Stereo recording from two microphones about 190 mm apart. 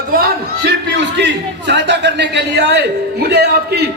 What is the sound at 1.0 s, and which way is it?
A man's voice, 65° right (ahead or behind).